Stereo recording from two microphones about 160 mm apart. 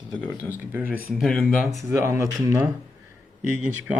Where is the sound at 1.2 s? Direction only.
5° left (ahead or behind).